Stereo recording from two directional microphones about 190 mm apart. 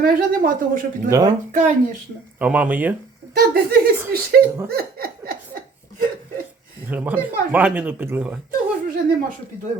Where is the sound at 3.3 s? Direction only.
55° right (ahead or behind).